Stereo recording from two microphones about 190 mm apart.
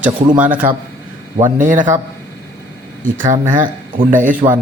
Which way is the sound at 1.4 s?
40° right (ahead or behind).